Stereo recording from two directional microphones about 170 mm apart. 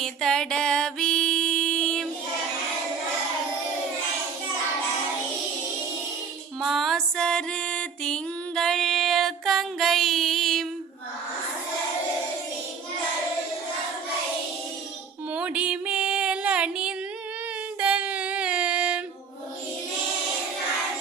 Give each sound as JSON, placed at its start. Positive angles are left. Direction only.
{"t": 0.0, "sound": "music", "side_deg": 5}
{"t": 6.6, "sound": "music", "side_deg": 0}
{"t": 15.3, "sound": "a sound", "side_deg": -5}
{"t": 17.7, "sound": "singing", "side_deg": -10}